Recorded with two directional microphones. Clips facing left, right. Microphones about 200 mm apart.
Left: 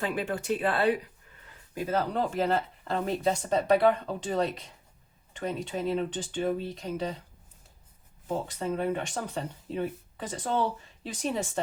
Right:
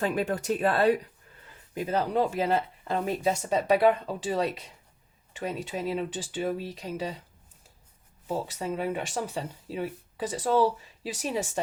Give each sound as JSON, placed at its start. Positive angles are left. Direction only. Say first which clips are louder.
{"t": 0.0, "sound": "speech", "louder": "right 3 dB", "side_deg": -40}
{"t": 1.7, "sound": "speech", "louder": "right 2 dB", "side_deg": -15}
{"t": 8.3, "sound": "speech", "louder": "even", "side_deg": -5}